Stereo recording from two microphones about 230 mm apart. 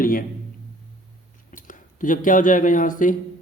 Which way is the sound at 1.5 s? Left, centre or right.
Left.